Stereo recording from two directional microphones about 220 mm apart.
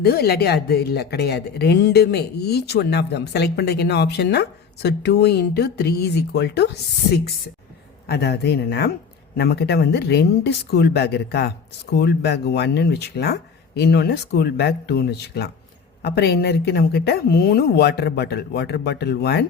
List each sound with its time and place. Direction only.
0.0 s speech: 45° left (ahead or behind)
8.0 s speech: 50° left (ahead or behind)